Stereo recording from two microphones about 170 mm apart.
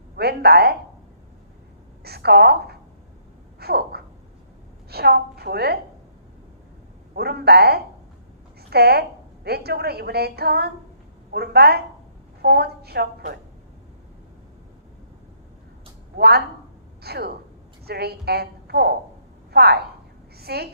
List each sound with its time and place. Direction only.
0.2 s a woman's voice: 70° right (ahead or behind)
2.0 s a woman's voice: 70° right (ahead or behind)
3.6 s a sound: 70° right (ahead or behind)
4.9 s a woman's voice: 70° right (ahead or behind)
7.2 s a woman's voice: 70° right (ahead or behind)
16.1 s a woman's voice: 70° right (ahead or behind)